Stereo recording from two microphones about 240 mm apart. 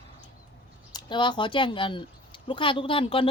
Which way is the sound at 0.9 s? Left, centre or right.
Centre.